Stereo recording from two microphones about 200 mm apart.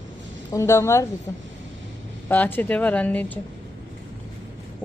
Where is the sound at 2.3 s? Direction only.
10° left (ahead or behind).